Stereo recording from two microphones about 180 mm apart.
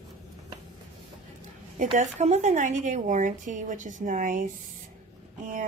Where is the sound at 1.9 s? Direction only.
40° right (ahead or behind).